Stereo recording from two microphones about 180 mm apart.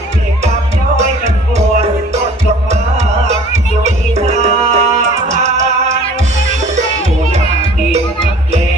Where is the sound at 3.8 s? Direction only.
40° right (ahead or behind).